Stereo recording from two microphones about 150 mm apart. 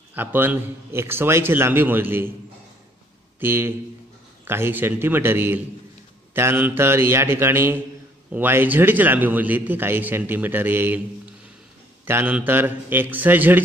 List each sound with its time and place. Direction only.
0.1 s a man's voice: 15° right (ahead or behind)
3.3 s a man's voice: 15° right (ahead or behind)
12.1 s a man's voice: 10° right (ahead or behind)